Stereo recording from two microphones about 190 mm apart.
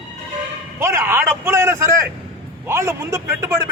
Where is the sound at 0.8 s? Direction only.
15° right (ahead or behind).